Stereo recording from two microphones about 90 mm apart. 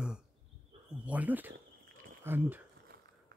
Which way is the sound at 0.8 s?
15° right (ahead or behind).